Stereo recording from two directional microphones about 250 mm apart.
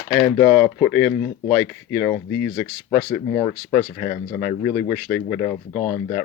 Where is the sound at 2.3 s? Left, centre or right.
Left.